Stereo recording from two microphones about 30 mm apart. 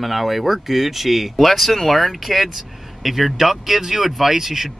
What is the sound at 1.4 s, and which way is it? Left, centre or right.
Speech, centre.